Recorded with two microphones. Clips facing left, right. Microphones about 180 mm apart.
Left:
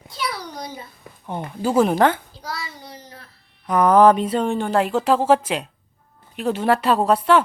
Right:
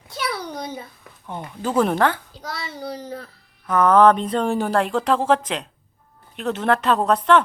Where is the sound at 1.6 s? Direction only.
10° left (ahead or behind).